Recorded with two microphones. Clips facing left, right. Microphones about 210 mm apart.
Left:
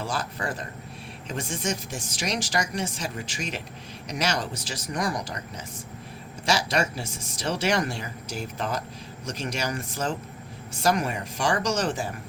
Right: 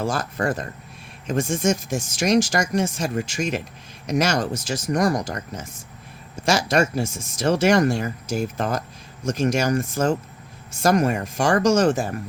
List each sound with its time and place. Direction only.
0.0 s speech: 45° right (ahead or behind)